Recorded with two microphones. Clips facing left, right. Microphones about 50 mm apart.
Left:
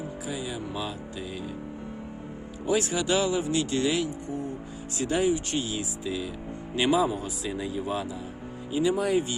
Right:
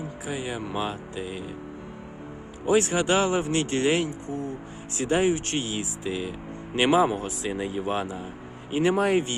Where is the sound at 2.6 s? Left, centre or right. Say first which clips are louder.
Right 4 dB; right.